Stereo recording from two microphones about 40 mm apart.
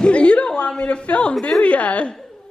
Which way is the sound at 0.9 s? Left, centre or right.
Left.